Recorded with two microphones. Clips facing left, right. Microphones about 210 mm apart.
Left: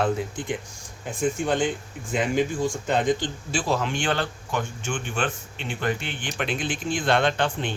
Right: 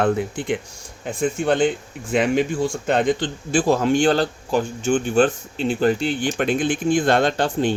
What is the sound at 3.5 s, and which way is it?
Speech, 45° right (ahead or behind).